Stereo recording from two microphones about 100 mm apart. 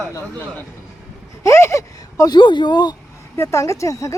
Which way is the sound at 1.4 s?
30° left (ahead or behind).